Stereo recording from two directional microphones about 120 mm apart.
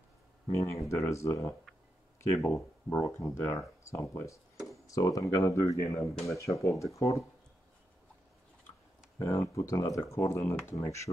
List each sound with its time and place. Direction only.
0.5 s speech: 25° left (ahead or behind)
9.2 s speech: 25° left (ahead or behind)